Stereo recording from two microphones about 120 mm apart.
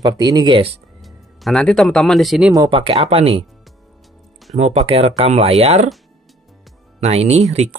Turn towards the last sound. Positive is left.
turn(degrees=-65)  # may be behind; listen again after turning